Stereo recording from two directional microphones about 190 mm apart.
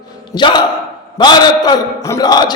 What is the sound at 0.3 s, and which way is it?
A man's voice, 25° left (ahead or behind).